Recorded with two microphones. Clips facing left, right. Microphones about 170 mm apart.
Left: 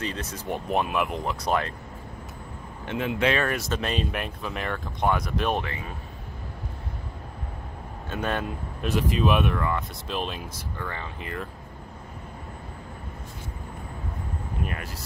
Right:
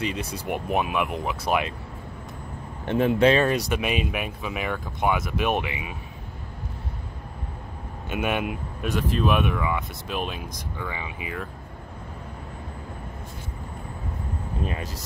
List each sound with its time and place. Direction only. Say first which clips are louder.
0.0 s speech: right 3 dB; 10° right (ahead or behind)
2.9 s speech: right 6 dB; 40° right (ahead or behind)
3.4 s speech: right 4 dB; 15° right (ahead or behind)
8.1 s speech: right 3 dB; 10° right (ahead or behind)
8.9 s speech: even; 5° left (ahead or behind)
14.6 s speech: right 3 dB; 25° right (ahead or behind)